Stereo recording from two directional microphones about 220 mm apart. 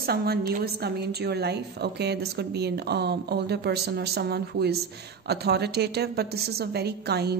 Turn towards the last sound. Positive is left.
turn(degrees=-45)  # may be behind; listen again after turning